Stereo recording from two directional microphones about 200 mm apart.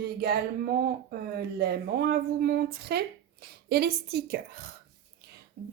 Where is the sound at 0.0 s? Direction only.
50° right (ahead or behind).